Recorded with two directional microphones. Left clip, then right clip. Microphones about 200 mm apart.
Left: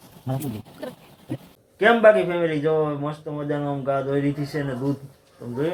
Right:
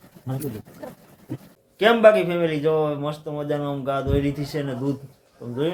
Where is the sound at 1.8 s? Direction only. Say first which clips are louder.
Even; 5° right (ahead or behind).